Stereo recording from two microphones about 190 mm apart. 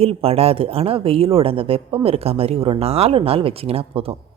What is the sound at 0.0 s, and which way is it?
A woman's voice, 30° right (ahead or behind).